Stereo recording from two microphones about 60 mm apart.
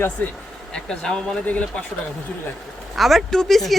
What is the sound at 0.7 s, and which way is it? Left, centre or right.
A woman's voice, centre.